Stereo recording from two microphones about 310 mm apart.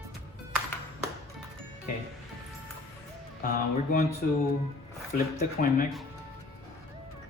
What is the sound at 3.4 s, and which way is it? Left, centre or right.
Speech, left.